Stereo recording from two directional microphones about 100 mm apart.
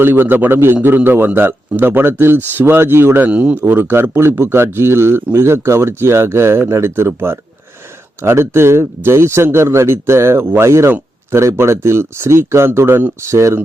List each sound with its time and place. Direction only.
0.0 s a man's voice: 20° right (ahead or behind)